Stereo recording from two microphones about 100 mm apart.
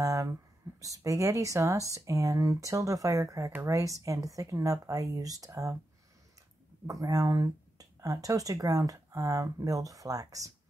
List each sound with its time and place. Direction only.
0.0 s speech: 30° right (ahead or behind)
6.9 s speech: 35° right (ahead or behind)